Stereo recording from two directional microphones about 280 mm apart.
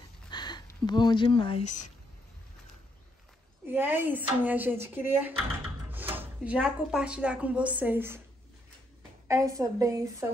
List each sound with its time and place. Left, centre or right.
0.3 s speech: centre
3.6 s speech: centre
9.3 s speech: centre